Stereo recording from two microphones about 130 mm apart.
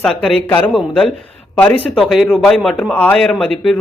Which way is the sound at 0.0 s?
Centre (ahead or behind).